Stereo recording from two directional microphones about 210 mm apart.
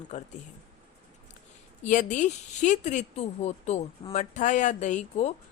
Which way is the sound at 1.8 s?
35° left (ahead or behind).